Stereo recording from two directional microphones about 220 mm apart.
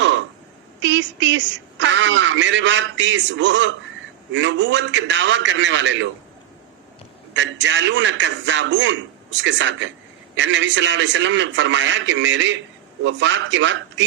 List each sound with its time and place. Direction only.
0.0 s a sound: 55° right (ahead or behind)
0.8 s a woman's voice: 55° right (ahead or behind)
7.3 s a man's voice: 55° right (ahead or behind)